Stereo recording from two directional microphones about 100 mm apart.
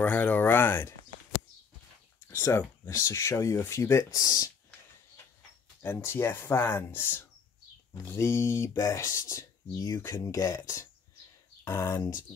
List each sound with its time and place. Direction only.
0.0 s a sound: 20° left (ahead or behind)
2.2 s speech: 25° left (ahead or behind)
5.8 s speech: 20° left (ahead or behind)